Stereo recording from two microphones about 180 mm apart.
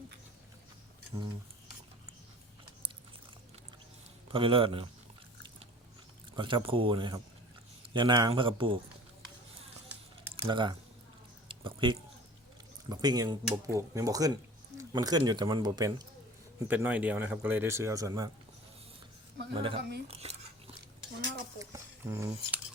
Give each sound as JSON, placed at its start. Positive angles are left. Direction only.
{"t": 4.3, "sound": "speech", "side_deg": -30}
{"t": 6.3, "sound": "speech", "side_deg": -25}
{"t": 10.5, "sound": "speech", "side_deg": -25}
{"t": 11.4, "sound": "a sound", "side_deg": -25}
{"t": 12.9, "sound": "speech", "side_deg": -20}
{"t": 16.6, "sound": "speech", "side_deg": -10}
{"t": 19.5, "sound": "speech", "side_deg": -30}
{"t": 21.6, "sound": "speech", "side_deg": -15}